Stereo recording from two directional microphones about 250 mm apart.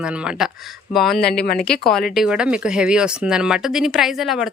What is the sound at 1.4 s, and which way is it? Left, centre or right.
Speech, left.